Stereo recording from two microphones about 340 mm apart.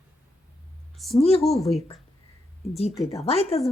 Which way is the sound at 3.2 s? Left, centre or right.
Centre.